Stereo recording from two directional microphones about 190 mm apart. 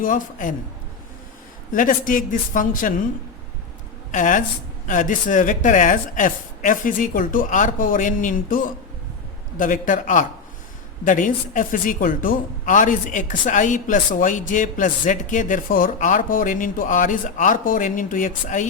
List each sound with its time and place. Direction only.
0.0 s speech: 45° left (ahead or behind)
1.7 s speech: 45° left (ahead or behind)
4.1 s speech: 45° left (ahead or behind)